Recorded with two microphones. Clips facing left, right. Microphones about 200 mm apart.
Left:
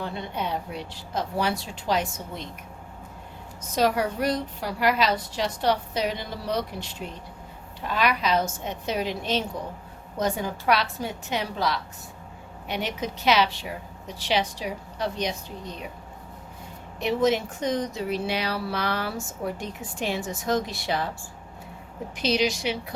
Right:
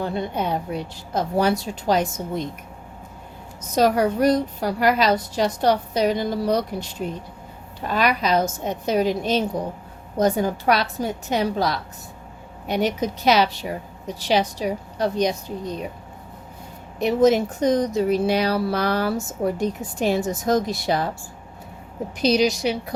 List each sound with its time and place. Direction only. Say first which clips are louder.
0.0 s a woman's voice: right 6 dB; 45° right (ahead or behind)
3.6 s speech: right 5 dB; 45° right (ahead or behind)
17.0 s speech: right 6 dB; 40° right (ahead or behind)
22.2 s speech: right 6 dB; 40° right (ahead or behind)